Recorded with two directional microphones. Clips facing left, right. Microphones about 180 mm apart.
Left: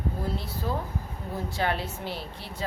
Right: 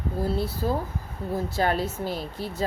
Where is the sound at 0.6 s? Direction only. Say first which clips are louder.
Right 4 dB; 35° right (ahead or behind).